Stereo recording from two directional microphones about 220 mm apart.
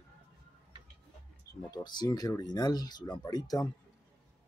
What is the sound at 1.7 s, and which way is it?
Speech, 20° left (ahead or behind).